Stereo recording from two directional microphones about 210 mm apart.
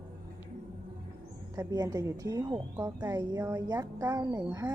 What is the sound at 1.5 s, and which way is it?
A woman's voice, 15° right (ahead or behind).